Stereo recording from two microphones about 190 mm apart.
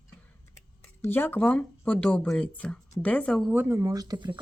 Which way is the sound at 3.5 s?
10° right (ahead or behind).